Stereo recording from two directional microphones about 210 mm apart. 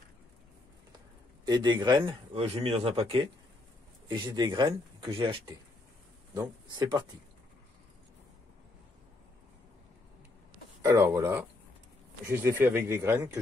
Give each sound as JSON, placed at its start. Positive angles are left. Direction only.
{"t": 1.4, "sound": "speech", "side_deg": -20}
{"t": 10.8, "sound": "speech", "side_deg": -15}